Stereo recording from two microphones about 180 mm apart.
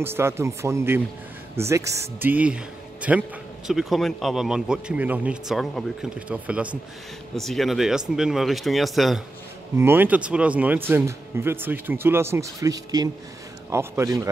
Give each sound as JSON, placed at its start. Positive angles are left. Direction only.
{"t": 0.0, "sound": "speech", "side_deg": -15}
{"t": 9.8, "sound": "speech", "side_deg": -10}